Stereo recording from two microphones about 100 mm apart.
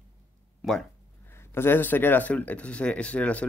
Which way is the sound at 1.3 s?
25° left (ahead or behind).